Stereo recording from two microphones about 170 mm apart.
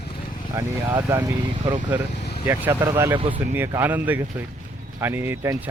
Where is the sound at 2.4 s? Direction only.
15° right (ahead or behind).